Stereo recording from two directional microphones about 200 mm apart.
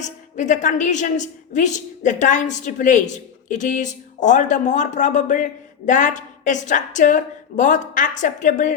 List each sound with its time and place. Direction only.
0.0 s a woman's voice: 40° left (ahead or behind)